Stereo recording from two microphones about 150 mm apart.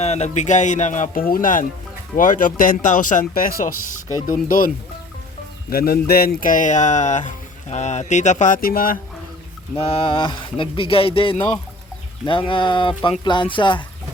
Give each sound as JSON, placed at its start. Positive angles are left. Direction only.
{"t": 0.0, "sound": "speech", "side_deg": 50}
{"t": 5.7, "sound": "speech", "side_deg": 90}
{"t": 9.7, "sound": "speech", "side_deg": 40}